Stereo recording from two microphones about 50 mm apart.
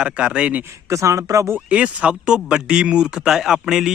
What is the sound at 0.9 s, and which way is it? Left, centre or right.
Speech, right.